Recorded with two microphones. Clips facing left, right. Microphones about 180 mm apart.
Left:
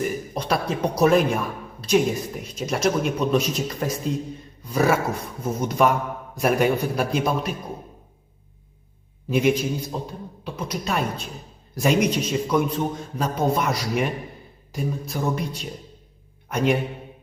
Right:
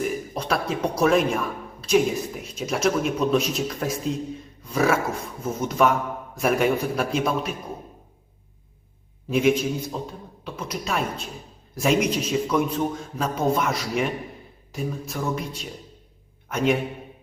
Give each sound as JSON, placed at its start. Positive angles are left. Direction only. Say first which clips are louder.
{"t": 0.0, "sound": "speech", "louder": "even", "side_deg": 0}
{"t": 9.3, "sound": "a man's voice", "louder": "even", "side_deg": 0}